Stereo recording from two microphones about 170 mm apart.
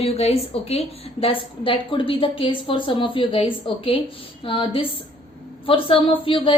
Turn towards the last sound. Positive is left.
turn(degrees=30)  # may be behind; listen again after turning